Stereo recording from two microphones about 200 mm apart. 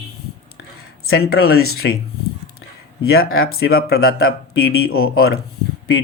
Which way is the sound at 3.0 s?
90° left.